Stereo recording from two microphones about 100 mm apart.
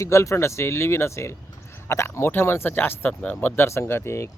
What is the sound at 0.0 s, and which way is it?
Speech, 30° left (ahead or behind).